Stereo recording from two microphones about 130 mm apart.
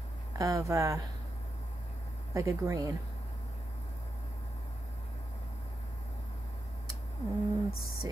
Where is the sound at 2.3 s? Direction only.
25° right (ahead or behind).